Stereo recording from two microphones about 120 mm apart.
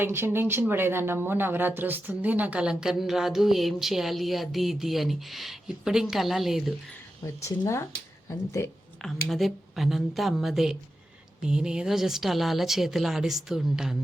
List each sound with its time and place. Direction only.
0.0 s speech: 20° right (ahead or behind); by 6.7 s centre (ahead or behind)
7.3 s speech: 25° left (ahead or behind)
9.0 s speech: 5° left (ahead or behind)